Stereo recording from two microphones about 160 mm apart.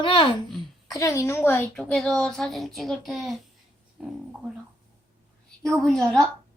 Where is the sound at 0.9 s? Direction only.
20° left (ahead or behind); by 4.5 s 5° right (ahead or behind).